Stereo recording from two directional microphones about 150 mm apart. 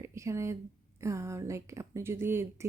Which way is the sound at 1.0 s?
20° right (ahead or behind).